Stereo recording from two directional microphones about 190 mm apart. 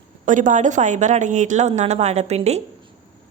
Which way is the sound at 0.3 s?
40° right (ahead or behind).